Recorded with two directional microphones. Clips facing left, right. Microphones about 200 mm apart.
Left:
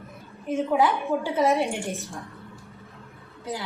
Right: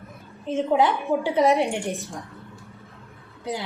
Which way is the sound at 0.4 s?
25° right (ahead or behind).